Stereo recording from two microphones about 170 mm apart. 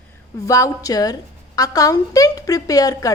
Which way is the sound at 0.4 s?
20° left (ahead or behind).